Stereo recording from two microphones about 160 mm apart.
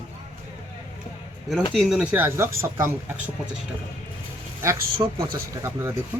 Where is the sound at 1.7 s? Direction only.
5° right (ahead or behind).